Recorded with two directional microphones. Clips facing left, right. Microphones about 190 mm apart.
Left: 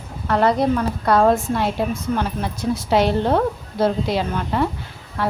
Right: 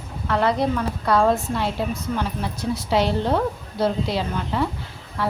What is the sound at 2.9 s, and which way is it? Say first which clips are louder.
A woman's voice: left 3 dB; 50° left (ahead or behind).